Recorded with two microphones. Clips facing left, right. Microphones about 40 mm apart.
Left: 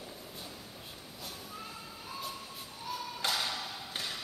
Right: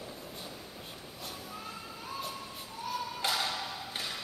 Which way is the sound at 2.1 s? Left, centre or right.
Centre.